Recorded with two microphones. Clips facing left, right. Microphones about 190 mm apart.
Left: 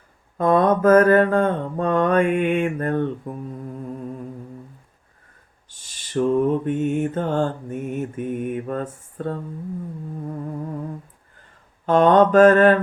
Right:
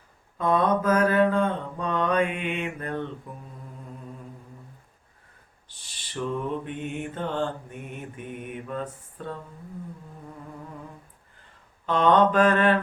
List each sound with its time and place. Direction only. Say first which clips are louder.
0.3 s mantra: left 6 dB; 50° left (ahead or behind)
5.6 s mantra: even; 45° left (ahead or behind)
11.9 s mantra: left 5 dB; 45° left (ahead or behind)